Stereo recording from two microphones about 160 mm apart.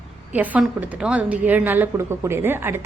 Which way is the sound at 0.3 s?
10° right (ahead or behind).